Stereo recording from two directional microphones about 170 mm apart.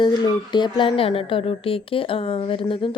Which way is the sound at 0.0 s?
25° left (ahead or behind).